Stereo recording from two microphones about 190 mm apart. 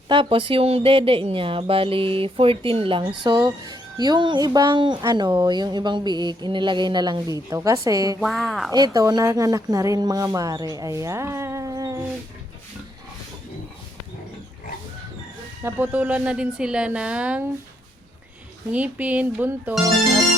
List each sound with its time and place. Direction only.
0.1 s speech: 25° right (ahead or behind)
8.2 s speech: centre (ahead or behind)
8.7 s speech: 20° right (ahead or behind)
15.6 s a woman's voice: 10° right (ahead or behind)
18.7 s a woman's voice: 5° right (ahead or behind)